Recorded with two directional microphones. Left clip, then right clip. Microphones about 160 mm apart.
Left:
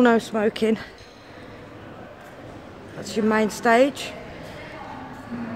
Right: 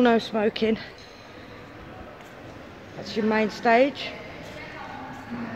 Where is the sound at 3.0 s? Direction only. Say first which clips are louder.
Left 2 dB; 5° left (ahead or behind).